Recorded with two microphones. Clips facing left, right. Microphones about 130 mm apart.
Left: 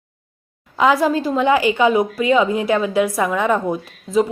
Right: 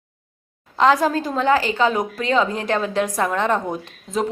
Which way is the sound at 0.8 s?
5° left (ahead or behind).